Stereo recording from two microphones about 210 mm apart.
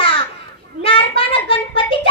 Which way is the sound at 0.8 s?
25° left (ahead or behind).